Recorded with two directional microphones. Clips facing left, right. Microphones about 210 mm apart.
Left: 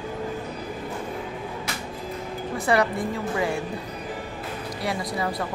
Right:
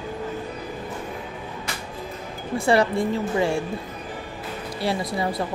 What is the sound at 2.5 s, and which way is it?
Speech, 30° right (ahead or behind).